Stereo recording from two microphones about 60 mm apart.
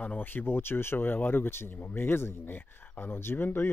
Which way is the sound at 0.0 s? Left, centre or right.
Left.